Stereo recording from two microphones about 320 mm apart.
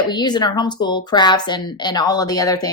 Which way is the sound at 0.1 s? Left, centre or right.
Centre.